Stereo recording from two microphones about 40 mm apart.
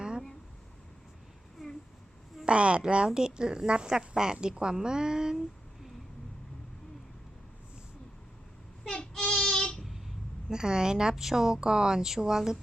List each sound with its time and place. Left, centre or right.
1.6 s a sound: centre
2.4 s a woman's voice: right
9.1 s child singing: centre
10.5 s a woman's voice: centre